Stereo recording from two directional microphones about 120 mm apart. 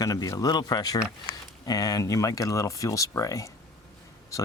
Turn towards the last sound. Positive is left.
turn(degrees=25)  # may be behind; listen again after turning